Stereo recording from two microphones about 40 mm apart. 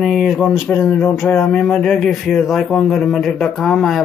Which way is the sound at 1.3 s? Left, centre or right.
Left.